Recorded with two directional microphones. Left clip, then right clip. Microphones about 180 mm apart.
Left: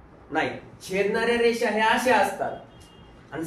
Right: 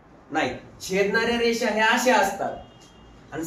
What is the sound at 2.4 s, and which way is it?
Speech, centre (ahead or behind).